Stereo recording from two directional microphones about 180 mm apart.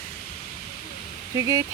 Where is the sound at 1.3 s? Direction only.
20° right (ahead or behind).